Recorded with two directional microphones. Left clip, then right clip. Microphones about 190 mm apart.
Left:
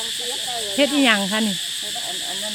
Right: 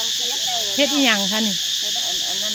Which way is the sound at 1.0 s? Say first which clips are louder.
Even; 10° left (ahead or behind).